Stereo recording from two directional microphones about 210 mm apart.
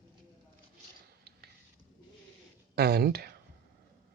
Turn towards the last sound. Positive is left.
turn(degrees=-50)  # may be behind; listen again after turning